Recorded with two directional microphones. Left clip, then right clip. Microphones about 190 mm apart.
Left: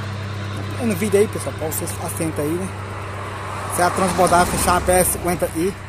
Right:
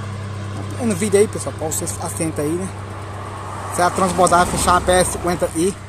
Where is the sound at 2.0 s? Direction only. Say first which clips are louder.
Right 1 dB; 10° right (ahead or behind).